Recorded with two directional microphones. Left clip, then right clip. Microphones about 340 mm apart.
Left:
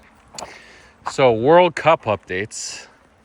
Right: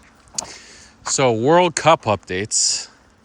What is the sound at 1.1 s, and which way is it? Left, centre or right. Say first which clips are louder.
Speech: left 2 dB; centre.